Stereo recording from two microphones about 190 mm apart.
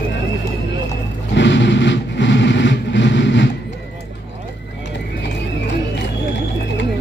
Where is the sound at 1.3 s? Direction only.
70° left (ahead or behind).